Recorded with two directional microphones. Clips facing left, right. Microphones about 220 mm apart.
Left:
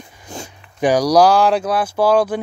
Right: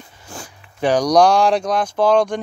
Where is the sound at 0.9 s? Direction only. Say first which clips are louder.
Left 1 dB; 10° left (ahead or behind).